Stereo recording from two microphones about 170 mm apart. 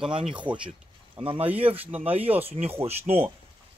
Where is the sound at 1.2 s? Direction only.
35° right (ahead or behind).